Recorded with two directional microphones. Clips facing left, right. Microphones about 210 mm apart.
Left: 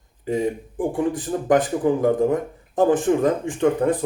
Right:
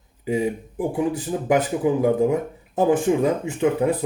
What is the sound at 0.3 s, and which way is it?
Speech, 10° right (ahead or behind).